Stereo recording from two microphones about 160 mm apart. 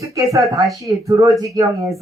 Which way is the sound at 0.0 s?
20° right (ahead or behind).